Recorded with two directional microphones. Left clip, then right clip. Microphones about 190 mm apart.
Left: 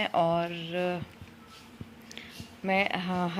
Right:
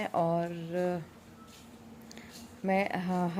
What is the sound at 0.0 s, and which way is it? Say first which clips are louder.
Speech: left 4 dB; 10° right (ahead or behind).